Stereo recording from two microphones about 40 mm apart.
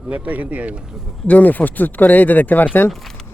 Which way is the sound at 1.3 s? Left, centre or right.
Left.